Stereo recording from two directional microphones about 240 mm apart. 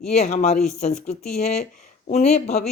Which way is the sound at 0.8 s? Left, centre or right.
Left.